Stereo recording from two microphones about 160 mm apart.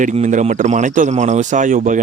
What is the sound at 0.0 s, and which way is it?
Speech, 50° right (ahead or behind).